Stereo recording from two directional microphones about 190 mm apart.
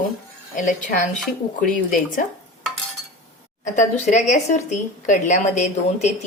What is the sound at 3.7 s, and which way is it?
A woman's voice, 40° left (ahead or behind).